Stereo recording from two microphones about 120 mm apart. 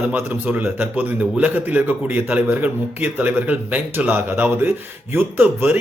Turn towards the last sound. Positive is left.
turn(degrees=-15)  # may be behind; listen again after turning